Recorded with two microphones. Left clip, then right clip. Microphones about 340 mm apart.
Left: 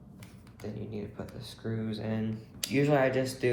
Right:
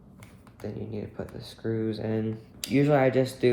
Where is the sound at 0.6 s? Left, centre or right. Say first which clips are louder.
Right 4 dB; right.